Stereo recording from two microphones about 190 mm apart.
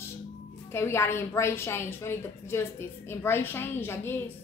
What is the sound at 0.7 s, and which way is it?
A woman's voice, 15° left (ahead or behind).